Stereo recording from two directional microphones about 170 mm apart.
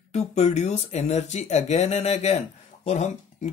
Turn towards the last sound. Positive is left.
turn(degrees=40)  # may be behind; listen again after turning